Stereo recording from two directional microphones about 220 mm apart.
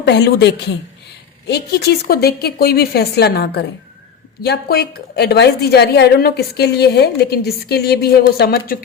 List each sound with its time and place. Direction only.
0.0 s a woman's voice: 50° left (ahead or behind)